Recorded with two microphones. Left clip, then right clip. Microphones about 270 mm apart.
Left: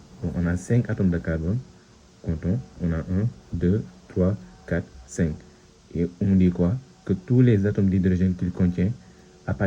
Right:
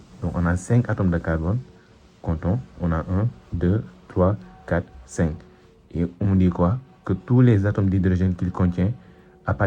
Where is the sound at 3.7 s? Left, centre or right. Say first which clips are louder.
Right 3 dB; right.